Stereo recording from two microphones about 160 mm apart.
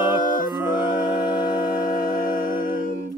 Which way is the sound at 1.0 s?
25° left (ahead or behind).